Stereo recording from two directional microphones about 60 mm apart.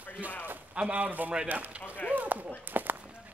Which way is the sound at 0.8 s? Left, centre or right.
Right.